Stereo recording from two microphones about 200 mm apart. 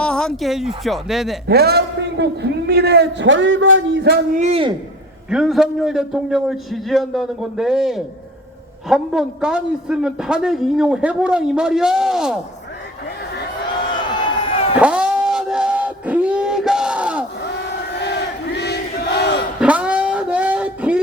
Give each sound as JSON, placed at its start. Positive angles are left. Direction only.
{"t": 0.0, "sound": "a man's voice", "side_deg": 5}
{"t": 1.5, "sound": "a man's voice", "side_deg": -55}
{"t": 4.4, "sound": "a man's voice", "side_deg": -30}
{"t": 5.3, "sound": "a man's voice", "side_deg": -5}
{"t": 14.8, "sound": "a sound", "side_deg": -5}
{"t": 18.0, "sound": "battle cry", "side_deg": 60}
{"t": 19.5, "sound": "a sound", "side_deg": -5}